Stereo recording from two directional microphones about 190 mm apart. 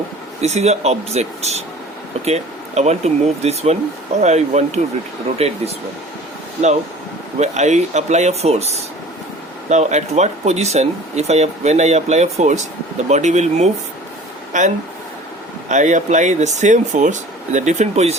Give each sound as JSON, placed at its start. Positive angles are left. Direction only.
{"t": 0.4, "sound": "speech", "side_deg": -35}
{"t": 7.3, "sound": "speech", "side_deg": -35}
{"t": 15.7, "sound": "speech", "side_deg": -40}